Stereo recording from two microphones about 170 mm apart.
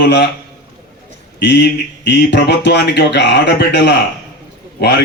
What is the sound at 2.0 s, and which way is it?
Speech, 85° left.